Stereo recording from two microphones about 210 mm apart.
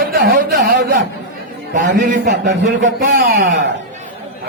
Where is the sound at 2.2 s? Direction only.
60° right (ahead or behind).